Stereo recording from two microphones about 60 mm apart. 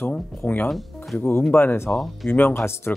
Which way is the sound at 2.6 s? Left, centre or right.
Left.